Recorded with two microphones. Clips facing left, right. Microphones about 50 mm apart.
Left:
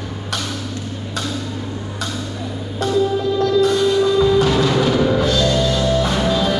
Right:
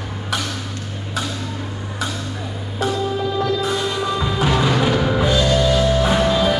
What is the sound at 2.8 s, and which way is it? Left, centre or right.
Music, centre.